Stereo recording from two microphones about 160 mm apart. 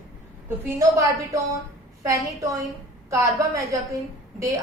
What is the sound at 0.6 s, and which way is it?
Speech, 15° right (ahead or behind).